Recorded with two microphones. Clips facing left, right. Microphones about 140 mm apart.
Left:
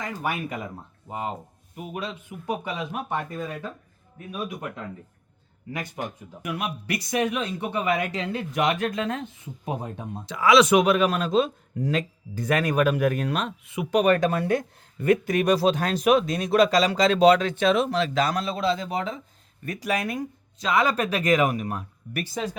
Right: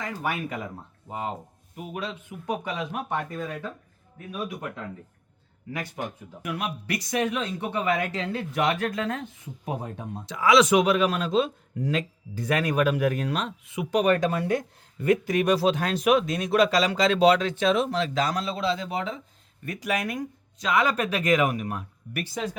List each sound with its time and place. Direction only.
0.0 s speech: 15° left (ahead or behind)
10.2 s speech: 70° left (ahead or behind); by 22.4 s 35° left (ahead or behind)